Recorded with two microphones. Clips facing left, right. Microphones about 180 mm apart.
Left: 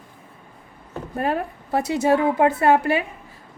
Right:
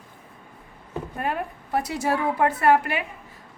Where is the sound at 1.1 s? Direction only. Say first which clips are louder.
Left 6 dB; 35° left (ahead or behind).